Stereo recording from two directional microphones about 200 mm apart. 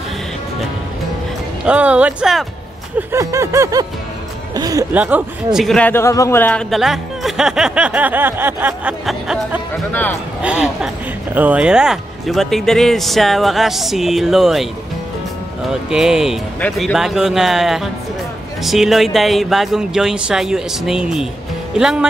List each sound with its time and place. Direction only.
1.7 s a man's voice: 5° right (ahead or behind)
3.0 s a sound: 15° right (ahead or behind)
4.9 s a man's voice: 5° right (ahead or behind)
15.7 s a man's voice: 5° right (ahead or behind)